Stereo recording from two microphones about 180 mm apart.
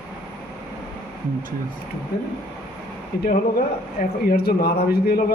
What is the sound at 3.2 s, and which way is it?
Speech, 55° left (ahead or behind).